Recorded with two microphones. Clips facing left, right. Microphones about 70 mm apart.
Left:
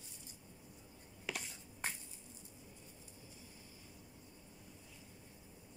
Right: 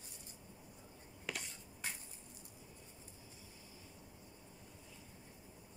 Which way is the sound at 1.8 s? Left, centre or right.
Left.